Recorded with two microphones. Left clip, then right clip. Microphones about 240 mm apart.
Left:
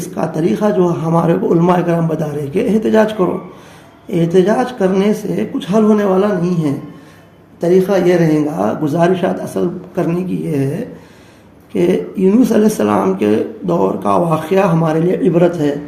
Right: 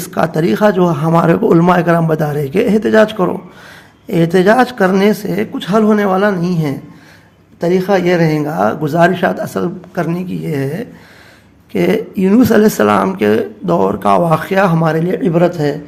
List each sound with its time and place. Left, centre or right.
0.1 s a man's voice: right
7.9 s speech: right
11.7 s speech: right